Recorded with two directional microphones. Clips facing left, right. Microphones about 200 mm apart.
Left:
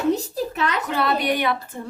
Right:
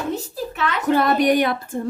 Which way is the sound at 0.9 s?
45° right (ahead or behind).